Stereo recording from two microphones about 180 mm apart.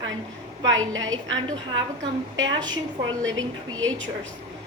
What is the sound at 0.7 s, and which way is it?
Speech, 90° right.